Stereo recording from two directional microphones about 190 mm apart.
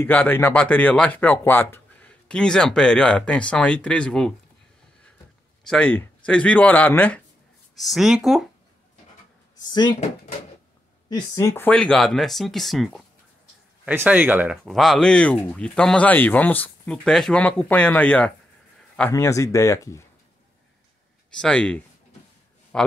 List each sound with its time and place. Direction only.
0.0 s speech: 10° left (ahead or behind)
5.7 s speech: 5° left (ahead or behind)
9.7 s speech: 20° left (ahead or behind)
11.1 s speech: 20° left (ahead or behind)
21.4 s a man's voice: 5° left (ahead or behind)